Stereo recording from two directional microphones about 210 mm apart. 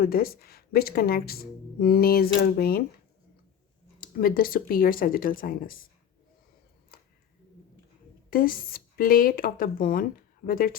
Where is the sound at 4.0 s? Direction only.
45° left (ahead or behind).